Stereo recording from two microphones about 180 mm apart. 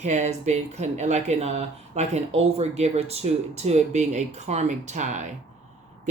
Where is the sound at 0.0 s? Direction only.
40° right (ahead or behind).